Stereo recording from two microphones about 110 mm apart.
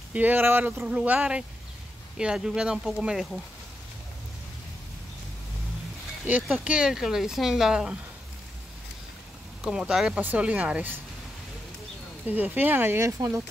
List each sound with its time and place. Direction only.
0.1 s speech: 15° right (ahead or behind)
6.5 s speech: 10° right (ahead or behind)
9.6 s speech: 5° right (ahead or behind)
12.3 s speech: 15° right (ahead or behind)